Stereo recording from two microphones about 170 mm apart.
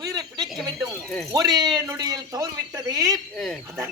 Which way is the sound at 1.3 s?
25° right (ahead or behind).